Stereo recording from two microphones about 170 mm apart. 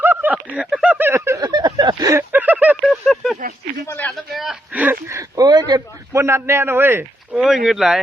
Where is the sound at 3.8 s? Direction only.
15° left (ahead or behind).